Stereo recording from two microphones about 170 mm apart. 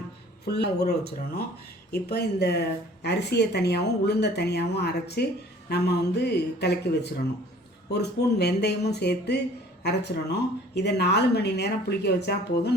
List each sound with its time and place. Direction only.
0.4 s a woman's voice: 70° left (ahead or behind)